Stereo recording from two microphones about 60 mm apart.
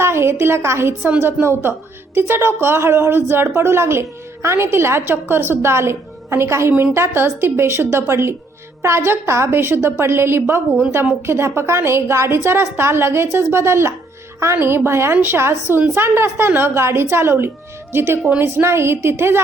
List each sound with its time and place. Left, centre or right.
0.0 s a woman's voice: right